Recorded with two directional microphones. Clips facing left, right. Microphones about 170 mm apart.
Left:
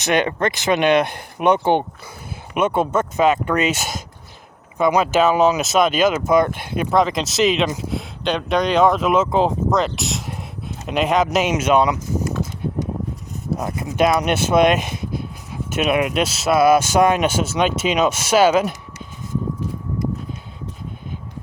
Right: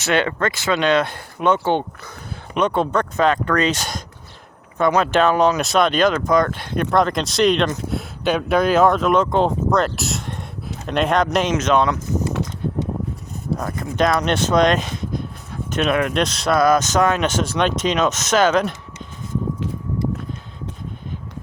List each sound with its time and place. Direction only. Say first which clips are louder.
0.0 s speech: left 1 dB; 15° left (ahead or behind)
13.6 s speech: left 2 dB; 15° left (ahead or behind)